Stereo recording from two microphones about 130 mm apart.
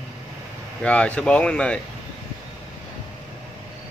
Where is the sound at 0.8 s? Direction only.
10° left (ahead or behind).